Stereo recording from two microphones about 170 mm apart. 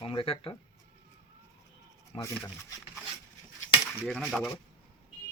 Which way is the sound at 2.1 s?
30° left (ahead or behind).